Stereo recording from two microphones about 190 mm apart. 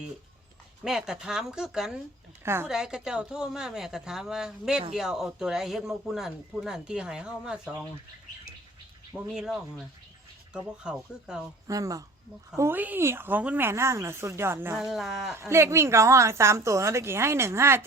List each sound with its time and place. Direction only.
0.9 s speech: 5° right (ahead or behind)
2.4 s speech: 15° right (ahead or behind)
9.1 s speech: 5° right (ahead or behind)
10.8 s speech: 5° right (ahead or behind)
11.7 s a woman's voice: 15° right (ahead or behind)
14.8 s speech: centre (ahead or behind)
15.4 s a woman's voice: 15° right (ahead or behind)